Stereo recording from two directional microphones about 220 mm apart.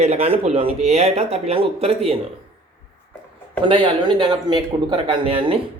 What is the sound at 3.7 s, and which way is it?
Speech, 20° right (ahead or behind).